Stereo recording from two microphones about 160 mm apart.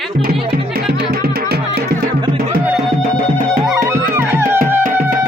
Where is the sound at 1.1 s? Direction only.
75° right (ahead or behind).